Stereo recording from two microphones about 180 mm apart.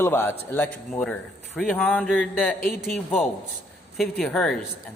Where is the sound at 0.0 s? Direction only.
15° left (ahead or behind).